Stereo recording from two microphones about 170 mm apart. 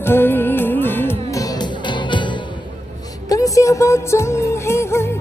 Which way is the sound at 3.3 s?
20° left (ahead or behind).